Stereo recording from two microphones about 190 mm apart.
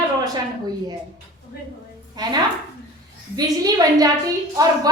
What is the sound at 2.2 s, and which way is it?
Speech, 20° right (ahead or behind).